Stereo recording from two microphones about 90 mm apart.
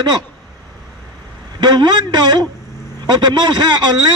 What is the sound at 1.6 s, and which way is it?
Speech, 55° right (ahead or behind).